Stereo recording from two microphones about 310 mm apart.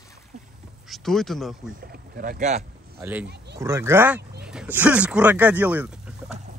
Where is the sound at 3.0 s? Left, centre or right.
Centre.